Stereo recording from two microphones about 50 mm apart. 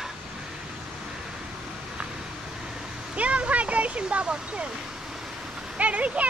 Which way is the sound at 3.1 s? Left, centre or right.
Right.